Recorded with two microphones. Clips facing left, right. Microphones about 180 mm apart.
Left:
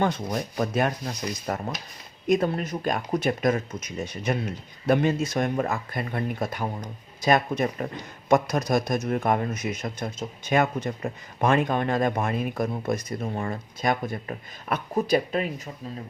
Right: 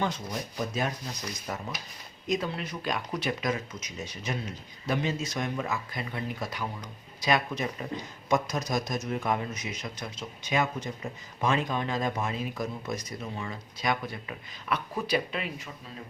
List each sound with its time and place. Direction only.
0.0 s a man's voice: 55° left (ahead or behind)